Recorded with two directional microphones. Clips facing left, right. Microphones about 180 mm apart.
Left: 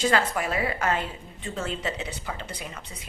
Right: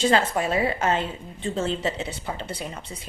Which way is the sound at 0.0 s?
25° right (ahead or behind).